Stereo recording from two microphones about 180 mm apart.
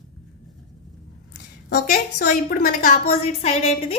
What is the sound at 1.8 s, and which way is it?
A woman's voice, 50° left (ahead or behind).